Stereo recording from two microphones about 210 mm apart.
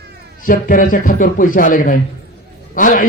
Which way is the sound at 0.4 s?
40° left (ahead or behind).